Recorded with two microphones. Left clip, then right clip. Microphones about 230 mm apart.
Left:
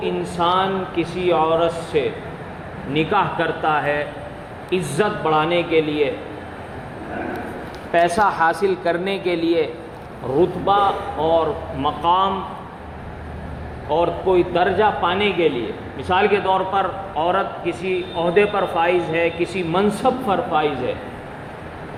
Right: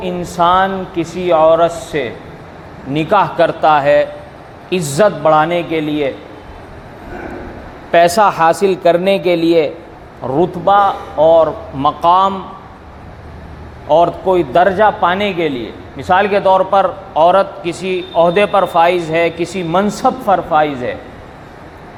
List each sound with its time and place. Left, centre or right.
0.0 s a man's voice: right
7.9 s a man's voice: right
8.5 s a man's voice: right
10.3 s a man's voice: right
13.9 s a man's voice: right